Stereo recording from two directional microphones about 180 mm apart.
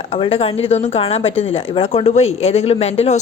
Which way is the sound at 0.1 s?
35° left (ahead or behind).